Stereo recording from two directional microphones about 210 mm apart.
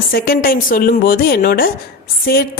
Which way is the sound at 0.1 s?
45° left (ahead or behind).